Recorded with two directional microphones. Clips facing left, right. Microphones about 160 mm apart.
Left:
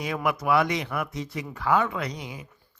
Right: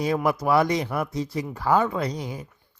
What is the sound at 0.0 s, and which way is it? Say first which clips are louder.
Speech: right 4 dB; 35° right (ahead or behind).